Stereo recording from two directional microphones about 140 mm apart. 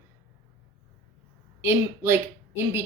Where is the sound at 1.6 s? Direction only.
15° right (ahead or behind).